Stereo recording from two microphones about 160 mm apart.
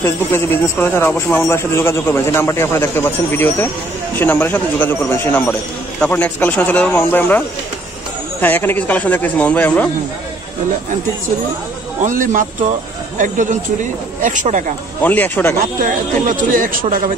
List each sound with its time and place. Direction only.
0.0 s speech: 15° left (ahead or behind)
12.0 s speech: 50° right (ahead or behind)
15.0 s speech: 10° left (ahead or behind)
15.8 s speech: 55° right (ahead or behind)